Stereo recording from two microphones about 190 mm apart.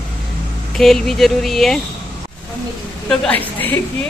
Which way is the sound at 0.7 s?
Centre (ahead or behind).